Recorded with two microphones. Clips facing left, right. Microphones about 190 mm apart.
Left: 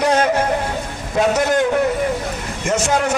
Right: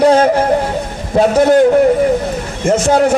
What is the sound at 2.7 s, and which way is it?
Speech, 35° right (ahead or behind).